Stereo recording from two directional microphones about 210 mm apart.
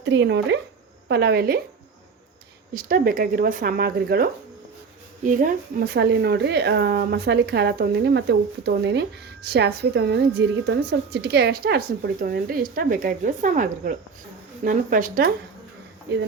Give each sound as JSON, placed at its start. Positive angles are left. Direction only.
{"t": 0.0, "sound": "speech", "side_deg": -60}
{"t": 2.7, "sound": "a woman's voice", "side_deg": -45}